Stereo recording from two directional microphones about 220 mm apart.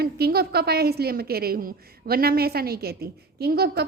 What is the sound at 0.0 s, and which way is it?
A woman's voice, 45° right (ahead or behind).